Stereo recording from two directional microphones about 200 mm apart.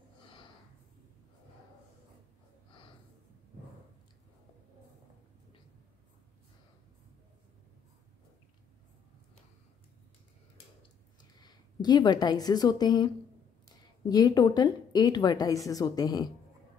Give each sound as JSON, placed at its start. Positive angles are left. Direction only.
{"t": 11.4, "sound": "a woman's voice", "side_deg": 20}